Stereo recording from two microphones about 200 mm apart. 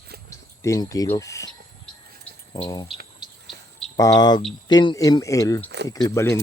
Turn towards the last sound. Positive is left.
turn(degrees=15)  # may be behind; listen again after turning